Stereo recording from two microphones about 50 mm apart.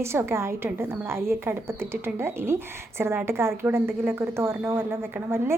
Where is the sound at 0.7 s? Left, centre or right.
Right.